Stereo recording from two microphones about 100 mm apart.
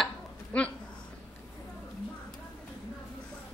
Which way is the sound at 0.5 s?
15° left (ahead or behind).